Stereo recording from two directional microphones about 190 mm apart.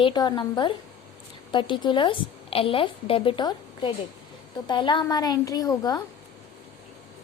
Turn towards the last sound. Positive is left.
turn(degrees=20)  # may be behind; listen again after turning